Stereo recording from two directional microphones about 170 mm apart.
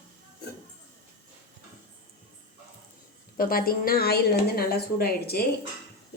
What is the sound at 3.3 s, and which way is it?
A woman's voice, 60° left (ahead or behind).